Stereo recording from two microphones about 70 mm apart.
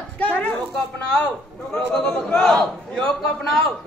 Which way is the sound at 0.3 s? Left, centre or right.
Left.